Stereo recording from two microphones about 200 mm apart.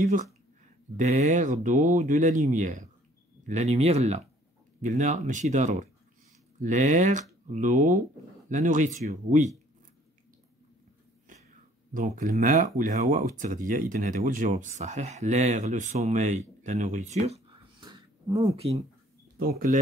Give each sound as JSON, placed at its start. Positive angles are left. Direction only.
{"t": 0.0, "sound": "speech", "side_deg": -40}
{"t": 11.9, "sound": "speech", "side_deg": -40}
{"t": 19.3, "sound": "speech", "side_deg": -45}